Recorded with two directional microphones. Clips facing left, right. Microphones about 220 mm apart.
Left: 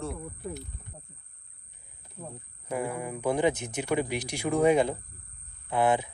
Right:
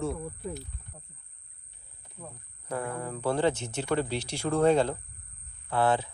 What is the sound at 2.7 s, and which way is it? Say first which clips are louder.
Speech: left 2 dB; 10° left (ahead or behind).